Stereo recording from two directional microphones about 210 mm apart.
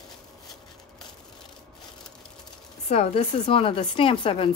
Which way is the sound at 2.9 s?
30° left (ahead or behind).